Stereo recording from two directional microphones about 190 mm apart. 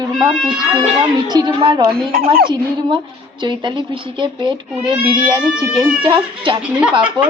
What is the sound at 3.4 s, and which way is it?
A woman's voice, 25° right (ahead or behind).